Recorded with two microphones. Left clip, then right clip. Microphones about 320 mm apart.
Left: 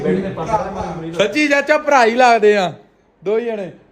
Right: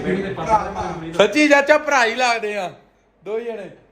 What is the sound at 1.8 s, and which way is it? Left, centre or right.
A man's voice, left.